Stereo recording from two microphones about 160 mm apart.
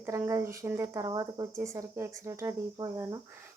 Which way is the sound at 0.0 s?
15° right (ahead or behind).